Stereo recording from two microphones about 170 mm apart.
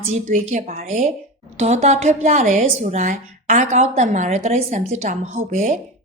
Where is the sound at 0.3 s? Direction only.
45° right (ahead or behind).